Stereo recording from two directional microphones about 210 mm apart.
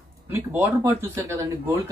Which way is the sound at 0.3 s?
10° right (ahead or behind).